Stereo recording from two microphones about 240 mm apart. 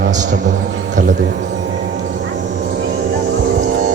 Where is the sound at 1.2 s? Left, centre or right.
Right.